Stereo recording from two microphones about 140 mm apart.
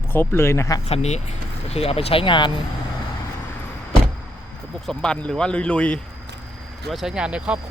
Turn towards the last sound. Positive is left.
turn(degrees=-10)  # may be behind; listen again after turning